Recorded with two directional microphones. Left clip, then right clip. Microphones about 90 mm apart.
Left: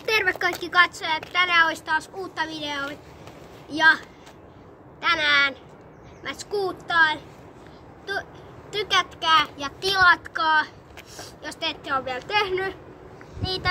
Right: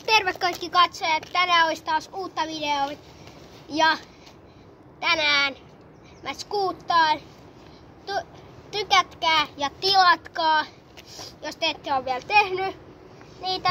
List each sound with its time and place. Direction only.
0.0 s a sound: 30° left (ahead or behind)
0.4 s a woman's voice: 45° left (ahead or behind); by 4.0 s 60° left (ahead or behind)
5.0 s speech: 50° left (ahead or behind)
8.8 s a child's voice: 65° left (ahead or behind)